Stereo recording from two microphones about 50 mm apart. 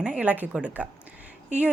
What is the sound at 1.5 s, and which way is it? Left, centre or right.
Speech, right.